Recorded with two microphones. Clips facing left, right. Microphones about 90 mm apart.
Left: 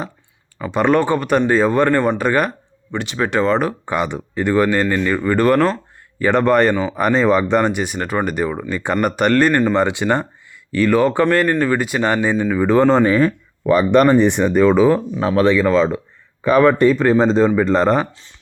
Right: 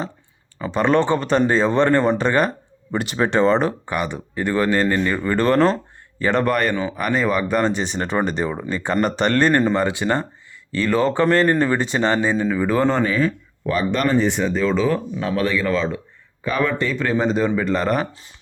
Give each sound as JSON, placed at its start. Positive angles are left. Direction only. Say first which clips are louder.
{"t": 0.6, "sound": "speech", "louder": "left 2 dB", "side_deg": 15}
{"t": 2.9, "sound": "speech", "louder": "even", "side_deg": -5}
{"t": 3.8, "sound": "speech", "louder": "left 4 dB", "side_deg": 20}
{"t": 4.9, "sound": "speech", "louder": "left 3 dB", "side_deg": -5}
{"t": 5.3, "sound": "speech", "louder": "left 3 dB", "side_deg": 10}
{"t": 5.6, "sound": "a sound", "louder": "even", "side_deg": 0}
{"t": 6.2, "sound": "speech", "louder": "left 5 dB", "side_deg": 20}
{"t": 9.7, "sound": "speech", "louder": "left 3 dB", "side_deg": 20}
{"t": 11.4, "sound": "speech", "louder": "left 1 dB", "side_deg": -20}
{"t": 11.8, "sound": "speech", "louder": "left 1 dB", "side_deg": 10}
{"t": 13.0, "sound": "speech", "louder": "left 5 dB", "side_deg": 40}
{"t": 14.0, "sound": "speech", "louder": "left 6 dB", "side_deg": 60}
{"t": 14.8, "sound": "speech", "louder": "left 6 dB", "side_deg": 25}